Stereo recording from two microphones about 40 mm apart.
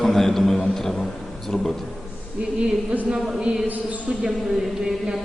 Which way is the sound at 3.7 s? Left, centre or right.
Right.